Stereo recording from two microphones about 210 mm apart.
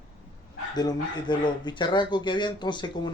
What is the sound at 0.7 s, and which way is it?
Speech, 20° left (ahead or behind).